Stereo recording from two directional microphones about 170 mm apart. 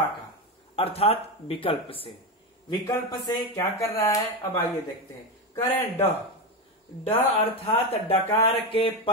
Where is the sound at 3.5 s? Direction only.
20° left (ahead or behind).